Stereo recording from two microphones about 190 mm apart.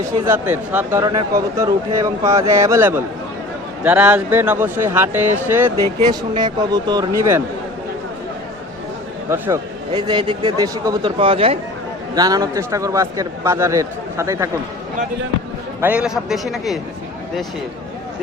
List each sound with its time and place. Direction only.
0.0 s a man's voice: 10° right (ahead or behind)
9.3 s a man's voice: 20° right (ahead or behind)
15.8 s a man's voice: 5° right (ahead or behind)